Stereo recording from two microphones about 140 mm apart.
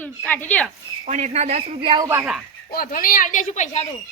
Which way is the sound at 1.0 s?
55° right (ahead or behind).